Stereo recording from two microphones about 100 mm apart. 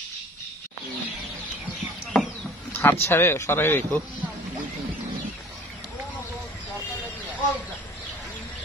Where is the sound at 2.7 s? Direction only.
25° left (ahead or behind).